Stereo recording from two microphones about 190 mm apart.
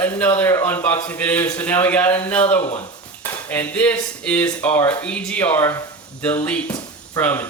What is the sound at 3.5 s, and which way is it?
Speech, 10° left (ahead or behind).